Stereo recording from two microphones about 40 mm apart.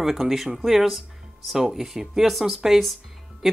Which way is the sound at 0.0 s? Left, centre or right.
Centre.